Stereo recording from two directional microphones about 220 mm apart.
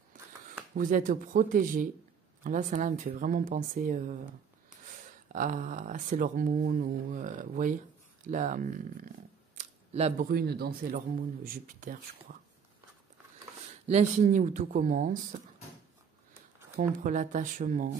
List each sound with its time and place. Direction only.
0.7 s speech: 35° right (ahead or behind)
13.8 s speech: 35° right (ahead or behind)
17.0 s speech: 35° right (ahead or behind)